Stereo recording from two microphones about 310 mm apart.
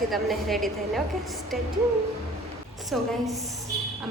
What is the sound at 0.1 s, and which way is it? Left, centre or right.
Speech, centre.